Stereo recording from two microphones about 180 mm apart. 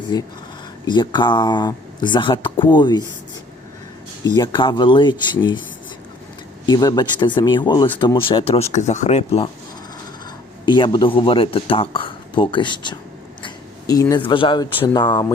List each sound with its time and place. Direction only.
0.1 s speech: 20° left (ahead or behind)
4.4 s speech: 25° left (ahead or behind)
6.7 s speech: 20° left (ahead or behind)
10.7 s speech: 25° left (ahead or behind)